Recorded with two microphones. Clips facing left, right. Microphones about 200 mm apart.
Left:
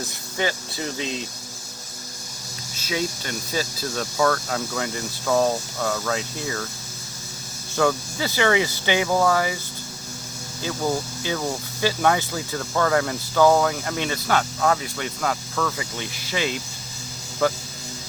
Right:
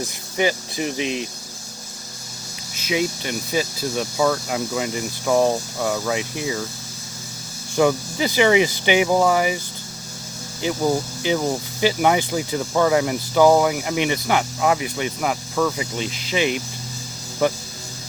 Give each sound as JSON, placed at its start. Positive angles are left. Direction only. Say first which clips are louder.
{"t": 0.3, "sound": "speech", "louder": "right 5 dB", "side_deg": -15}
{"t": 2.8, "sound": "speech", "louder": "right 4 dB", "side_deg": -15}
{"t": 7.8, "sound": "speech", "louder": "right 4 dB", "side_deg": -15}
{"t": 10.6, "sound": "speech", "louder": "right 4 dB", "side_deg": -15}